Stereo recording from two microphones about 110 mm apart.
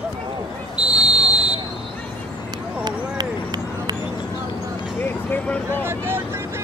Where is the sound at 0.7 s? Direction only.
10° right (ahead or behind).